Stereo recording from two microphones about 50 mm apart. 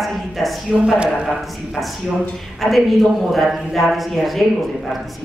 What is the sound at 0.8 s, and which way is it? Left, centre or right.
Speech, right.